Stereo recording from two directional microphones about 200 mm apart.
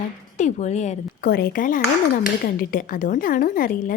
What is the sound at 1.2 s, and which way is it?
A woman's voice, 50° left (ahead or behind).